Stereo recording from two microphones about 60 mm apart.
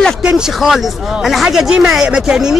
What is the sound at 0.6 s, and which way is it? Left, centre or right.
Speech, centre.